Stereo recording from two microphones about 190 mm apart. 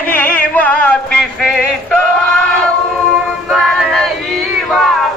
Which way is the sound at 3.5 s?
Centre (ahead or behind).